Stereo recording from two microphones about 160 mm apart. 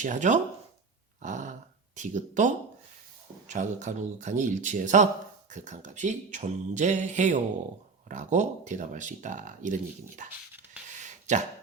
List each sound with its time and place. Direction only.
0.0 s speech: 50° right (ahead or behind)
3.5 s speech: 50° right (ahead or behind)
11.0 s a sound: 50° right (ahead or behind)